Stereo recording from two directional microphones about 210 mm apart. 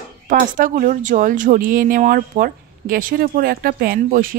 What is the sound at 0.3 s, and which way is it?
Speech, 40° right (ahead or behind).